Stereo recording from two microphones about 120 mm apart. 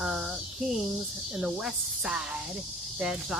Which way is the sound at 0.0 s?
5° right (ahead or behind).